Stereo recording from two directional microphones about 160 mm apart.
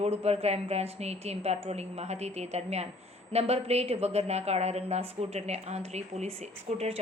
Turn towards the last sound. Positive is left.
turn(degrees=-40)  # may be behind; listen again after turning